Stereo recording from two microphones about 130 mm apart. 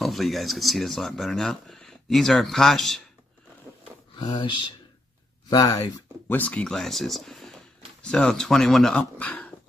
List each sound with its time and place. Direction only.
0.0 s speech: centre (ahead or behind)
4.2 s speech: 35° left (ahead or behind)
6.3 s speech: 10° left (ahead or behind)